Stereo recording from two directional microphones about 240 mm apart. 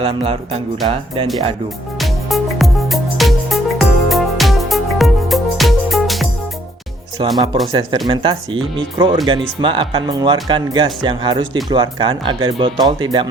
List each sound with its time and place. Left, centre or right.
0.0 s speech: right
2.0 s music: centre
7.3 s speech: right